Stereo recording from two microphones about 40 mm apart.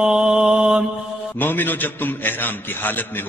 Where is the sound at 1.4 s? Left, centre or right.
Left.